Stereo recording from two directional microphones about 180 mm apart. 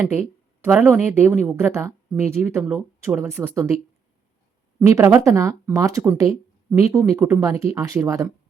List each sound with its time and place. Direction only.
0.0 s speech: 10° right (ahead or behind)
4.8 s speech: 15° right (ahead or behind)